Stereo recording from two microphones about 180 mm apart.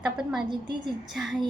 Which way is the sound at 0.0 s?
5° right (ahead or behind).